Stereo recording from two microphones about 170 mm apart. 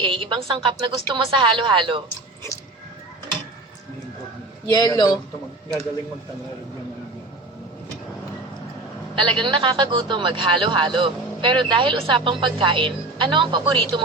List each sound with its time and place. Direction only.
0.0 s a man's voice: 30° right (ahead or behind)
4.6 s a man's voice: 20° left (ahead or behind)
9.1 s a man's voice: 30° right (ahead or behind)